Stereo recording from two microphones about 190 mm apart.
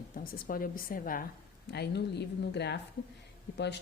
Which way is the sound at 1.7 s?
60° left (ahead or behind).